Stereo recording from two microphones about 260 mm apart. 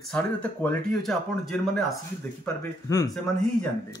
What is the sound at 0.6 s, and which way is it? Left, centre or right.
Speech, centre.